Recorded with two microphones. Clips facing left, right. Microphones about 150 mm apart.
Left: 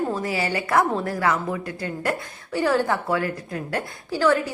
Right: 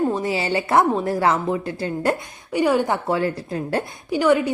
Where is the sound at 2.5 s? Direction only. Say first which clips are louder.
Right 2 dB; 15° right (ahead or behind).